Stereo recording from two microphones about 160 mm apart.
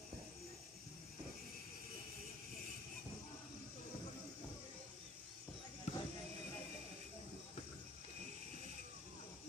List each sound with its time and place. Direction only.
5.9 s basketball bounce: 45° left (ahead or behind)